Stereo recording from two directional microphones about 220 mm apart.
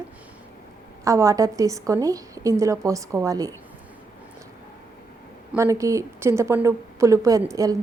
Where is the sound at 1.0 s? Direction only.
15° right (ahead or behind).